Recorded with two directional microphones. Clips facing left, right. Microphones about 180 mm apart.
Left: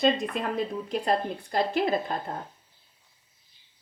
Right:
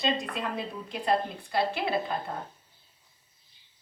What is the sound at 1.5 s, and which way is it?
Speech, 45° left (ahead or behind).